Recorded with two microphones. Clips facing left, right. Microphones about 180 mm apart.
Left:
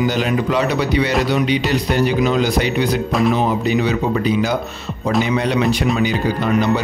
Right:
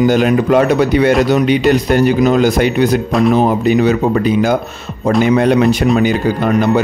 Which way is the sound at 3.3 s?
50° right (ahead or behind).